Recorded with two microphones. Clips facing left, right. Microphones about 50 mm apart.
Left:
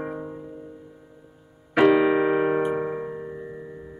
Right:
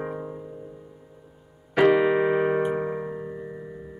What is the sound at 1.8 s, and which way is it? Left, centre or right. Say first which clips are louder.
Keyboard: left 1 dB; centre.